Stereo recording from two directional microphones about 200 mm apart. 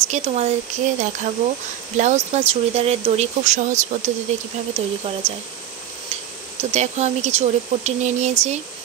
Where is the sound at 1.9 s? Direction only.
35° right (ahead or behind).